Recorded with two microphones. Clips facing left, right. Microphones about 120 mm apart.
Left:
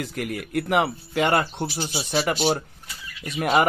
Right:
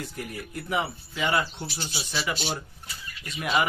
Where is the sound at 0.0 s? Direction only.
80° left.